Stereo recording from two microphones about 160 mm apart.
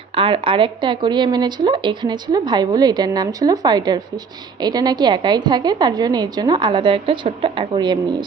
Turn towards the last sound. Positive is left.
turn(degrees=-30)  # may be behind; listen again after turning